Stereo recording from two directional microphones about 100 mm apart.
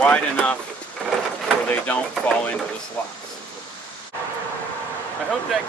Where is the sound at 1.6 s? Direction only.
20° left (ahead or behind).